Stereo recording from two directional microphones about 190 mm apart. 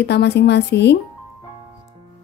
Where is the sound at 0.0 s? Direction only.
60° left (ahead or behind).